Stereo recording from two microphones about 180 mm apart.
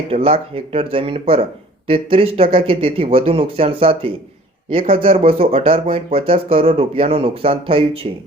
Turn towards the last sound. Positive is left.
turn(degrees=-30)  # may be behind; listen again after turning